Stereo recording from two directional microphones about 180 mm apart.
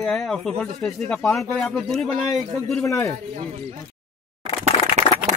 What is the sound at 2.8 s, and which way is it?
Speech, 15° left (ahead or behind).